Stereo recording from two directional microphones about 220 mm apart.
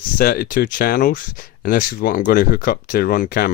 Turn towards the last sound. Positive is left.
turn(degrees=40)  # may be behind; listen again after turning